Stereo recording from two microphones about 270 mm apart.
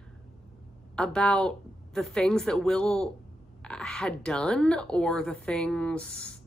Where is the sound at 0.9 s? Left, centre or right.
Centre.